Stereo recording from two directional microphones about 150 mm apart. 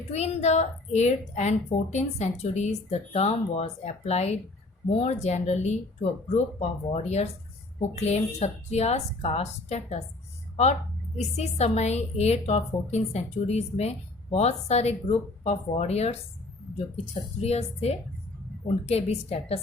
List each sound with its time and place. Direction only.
0.1 s a woman's voice: 50° left (ahead or behind)
11.2 s a woman's voice: 45° left (ahead or behind)
17.4 s a woman's voice: 45° left (ahead or behind)